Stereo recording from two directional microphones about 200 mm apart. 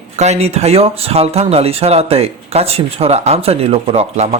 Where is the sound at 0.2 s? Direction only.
35° right (ahead or behind).